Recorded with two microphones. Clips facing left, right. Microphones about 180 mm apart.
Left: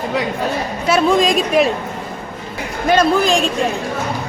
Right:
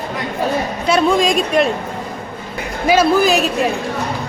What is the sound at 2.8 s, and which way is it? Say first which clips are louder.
Speech: right 1 dB; 5° right (ahead or behind).